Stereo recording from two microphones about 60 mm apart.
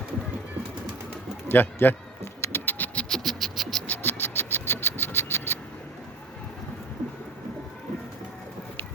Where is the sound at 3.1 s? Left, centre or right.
Centre.